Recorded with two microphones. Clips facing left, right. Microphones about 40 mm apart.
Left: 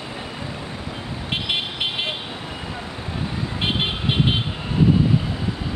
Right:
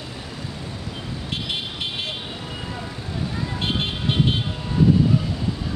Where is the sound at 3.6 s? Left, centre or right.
Left.